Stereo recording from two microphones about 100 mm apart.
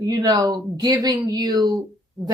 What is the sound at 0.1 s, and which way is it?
Speech, 40° right (ahead or behind).